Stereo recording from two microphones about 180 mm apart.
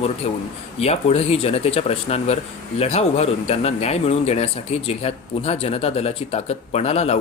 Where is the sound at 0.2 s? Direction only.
40° left (ahead or behind).